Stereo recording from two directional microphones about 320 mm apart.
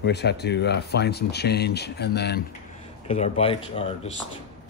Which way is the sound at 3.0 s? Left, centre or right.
Centre.